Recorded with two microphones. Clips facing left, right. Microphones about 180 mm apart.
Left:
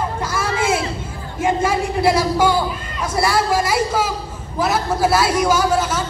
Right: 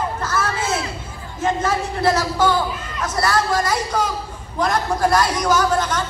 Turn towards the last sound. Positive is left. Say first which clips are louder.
# left 1 dB
turn(degrees=5)  # may be behind; listen again after turning